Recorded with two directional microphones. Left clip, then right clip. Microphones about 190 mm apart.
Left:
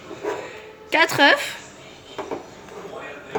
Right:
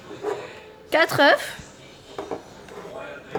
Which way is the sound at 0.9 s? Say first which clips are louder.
Left 1 dB; 35° right (ahead or behind).